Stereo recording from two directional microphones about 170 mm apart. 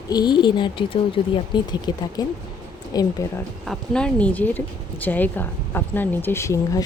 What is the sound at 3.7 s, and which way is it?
Speech, 5° left (ahead or behind).